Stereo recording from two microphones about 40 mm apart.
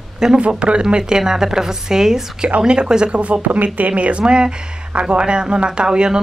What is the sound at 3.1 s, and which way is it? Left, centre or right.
Speech, right.